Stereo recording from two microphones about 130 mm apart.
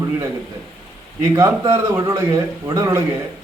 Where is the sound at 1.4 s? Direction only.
25° right (ahead or behind).